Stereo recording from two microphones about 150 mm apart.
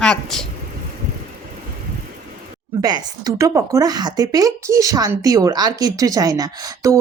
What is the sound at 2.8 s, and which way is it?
Speech, 25° right (ahead or behind).